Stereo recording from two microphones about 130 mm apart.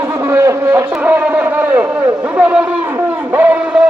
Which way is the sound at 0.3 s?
20° right (ahead or behind).